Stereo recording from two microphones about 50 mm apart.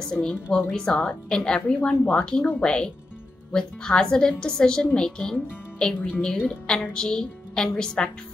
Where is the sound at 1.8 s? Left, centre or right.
Left.